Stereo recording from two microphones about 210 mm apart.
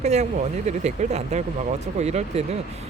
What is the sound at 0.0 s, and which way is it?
Speech, 35° right (ahead or behind).